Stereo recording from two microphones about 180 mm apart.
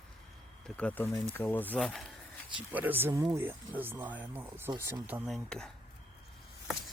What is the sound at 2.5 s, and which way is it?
Speech, 10° right (ahead or behind).